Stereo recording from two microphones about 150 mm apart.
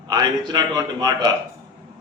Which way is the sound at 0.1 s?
25° right (ahead or behind).